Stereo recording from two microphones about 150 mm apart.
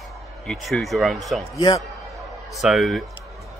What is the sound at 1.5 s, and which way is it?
Speech, 25° left (ahead or behind).